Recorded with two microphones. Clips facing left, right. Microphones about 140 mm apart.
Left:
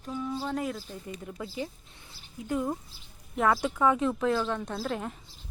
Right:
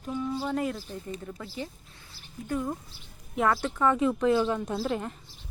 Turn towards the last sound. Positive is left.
turn(degrees=0)  # may be behind; listen again after turning